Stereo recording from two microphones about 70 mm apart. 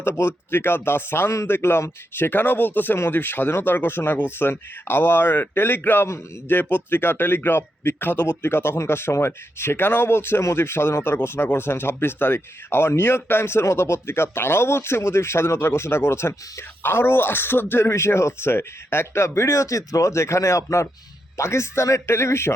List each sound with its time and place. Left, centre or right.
0.0 s speech: left